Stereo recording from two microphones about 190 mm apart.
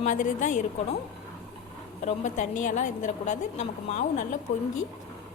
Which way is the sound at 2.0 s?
40° left (ahead or behind).